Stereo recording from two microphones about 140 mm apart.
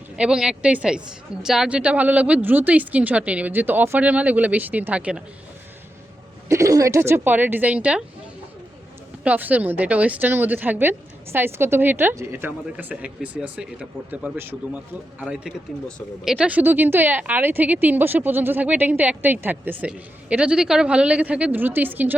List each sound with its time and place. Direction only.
0.2 s a woman's voice: 5° right (ahead or behind)
6.5 s a woman's voice: 25° right (ahead or behind)
9.2 s a woman's voice: 10° right (ahead or behind)